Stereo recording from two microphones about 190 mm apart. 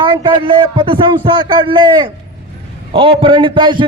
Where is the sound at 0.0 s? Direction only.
25° right (ahead or behind).